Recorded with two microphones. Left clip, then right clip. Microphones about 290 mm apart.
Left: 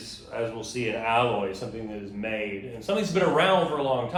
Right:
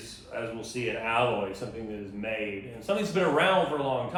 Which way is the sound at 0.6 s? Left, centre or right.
Left.